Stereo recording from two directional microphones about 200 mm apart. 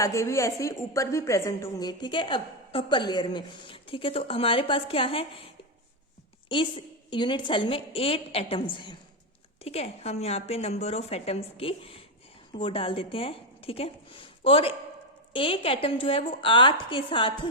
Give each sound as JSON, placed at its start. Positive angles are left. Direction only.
{"t": 0.0, "sound": "a woman's voice", "side_deg": 15}
{"t": 6.5, "sound": "a woman's voice", "side_deg": 25}